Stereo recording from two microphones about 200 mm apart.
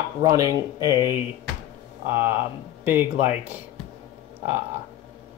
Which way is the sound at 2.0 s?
10° right (ahead or behind).